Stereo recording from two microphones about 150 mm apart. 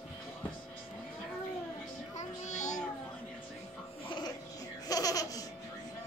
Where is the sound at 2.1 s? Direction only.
50° left (ahead or behind).